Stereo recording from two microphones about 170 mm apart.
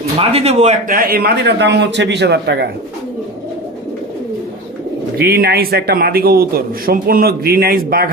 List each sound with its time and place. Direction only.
0.2 s a man's voice: 35° right (ahead or behind)
0.9 s a man's voice: 60° right (ahead or behind); by 2.6 s 85° right
5.1 s a man's voice: 65° right (ahead or behind)